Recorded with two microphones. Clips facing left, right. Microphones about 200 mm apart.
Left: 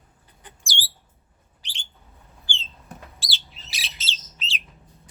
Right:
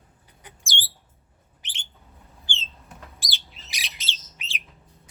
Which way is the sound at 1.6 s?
20° right (ahead or behind).